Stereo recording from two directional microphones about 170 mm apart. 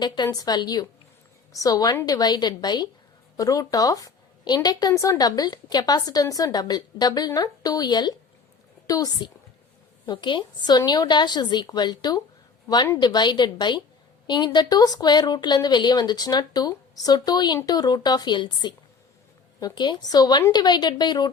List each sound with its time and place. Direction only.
0.0 s a woman's voice: 25° left (ahead or behind)